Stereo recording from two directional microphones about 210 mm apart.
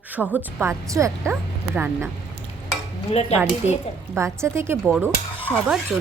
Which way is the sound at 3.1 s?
30° left (ahead or behind).